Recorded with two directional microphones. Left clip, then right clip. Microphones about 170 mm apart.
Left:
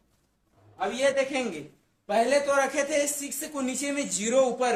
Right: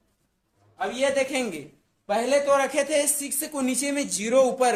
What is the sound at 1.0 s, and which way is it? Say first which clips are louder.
Speech: right 1 dB; 35° right (ahead or behind).